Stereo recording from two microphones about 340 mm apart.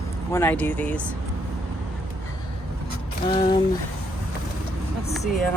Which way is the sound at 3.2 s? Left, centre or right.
Centre.